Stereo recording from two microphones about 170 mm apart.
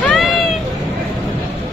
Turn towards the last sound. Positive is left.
turn(degrees=0)  # may be behind; listen again after turning